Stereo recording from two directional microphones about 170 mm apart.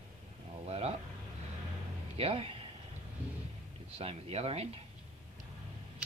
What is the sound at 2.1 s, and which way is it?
Speech, 35° right (ahead or behind).